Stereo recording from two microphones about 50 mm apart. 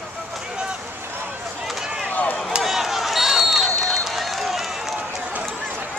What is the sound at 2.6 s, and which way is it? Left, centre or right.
Run, centre.